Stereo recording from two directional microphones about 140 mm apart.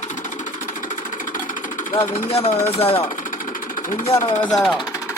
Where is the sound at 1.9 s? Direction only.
45° left (ahead or behind).